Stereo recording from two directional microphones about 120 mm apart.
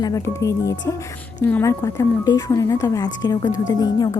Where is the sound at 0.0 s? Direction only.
25° left (ahead or behind).